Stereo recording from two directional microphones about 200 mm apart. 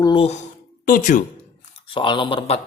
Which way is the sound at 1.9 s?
25° left (ahead or behind).